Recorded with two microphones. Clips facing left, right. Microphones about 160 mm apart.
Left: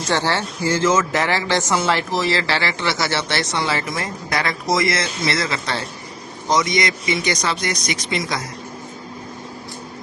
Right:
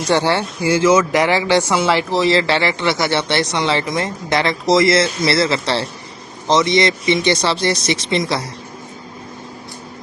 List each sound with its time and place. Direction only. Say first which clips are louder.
0.1 s speech: right 4 dB; 15° right (ahead or behind)